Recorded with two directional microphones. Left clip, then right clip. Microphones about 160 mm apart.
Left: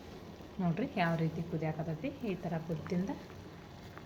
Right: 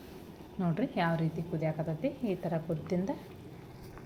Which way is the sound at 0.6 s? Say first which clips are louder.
Right 2 dB; 20° right (ahead or behind).